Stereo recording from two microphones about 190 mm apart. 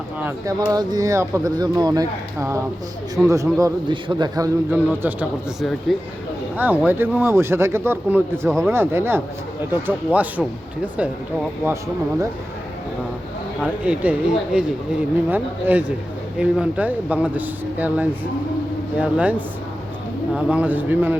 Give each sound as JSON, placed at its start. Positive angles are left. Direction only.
{"t": 0.2, "sound": "speech", "side_deg": -15}
{"t": 4.7, "sound": "speech", "side_deg": -10}
{"t": 13.6, "sound": "speech", "side_deg": -5}